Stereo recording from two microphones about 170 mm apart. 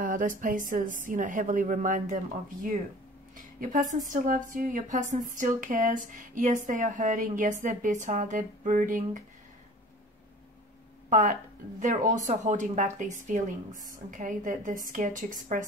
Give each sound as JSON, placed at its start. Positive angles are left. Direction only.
{"t": 0.0, "sound": "speech", "side_deg": -50}
{"t": 3.3, "sound": "speech", "side_deg": -50}
{"t": 11.1, "sound": "speech", "side_deg": -45}